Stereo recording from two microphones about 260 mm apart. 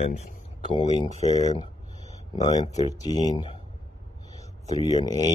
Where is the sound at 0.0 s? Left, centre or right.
Left.